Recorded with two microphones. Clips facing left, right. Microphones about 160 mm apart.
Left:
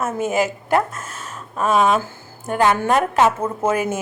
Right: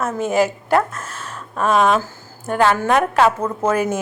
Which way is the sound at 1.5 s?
5° left (ahead or behind).